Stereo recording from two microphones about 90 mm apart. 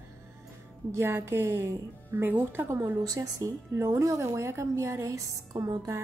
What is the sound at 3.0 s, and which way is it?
A woman's voice, 40° right (ahead or behind).